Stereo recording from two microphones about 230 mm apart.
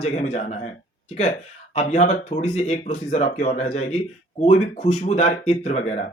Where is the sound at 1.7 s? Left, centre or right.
Left.